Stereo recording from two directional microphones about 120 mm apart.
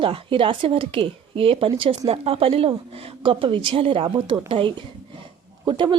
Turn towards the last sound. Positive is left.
turn(degrees=-40)  # may be behind; listen again after turning